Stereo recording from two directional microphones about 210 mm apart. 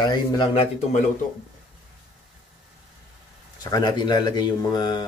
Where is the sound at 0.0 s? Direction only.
20° left (ahead or behind).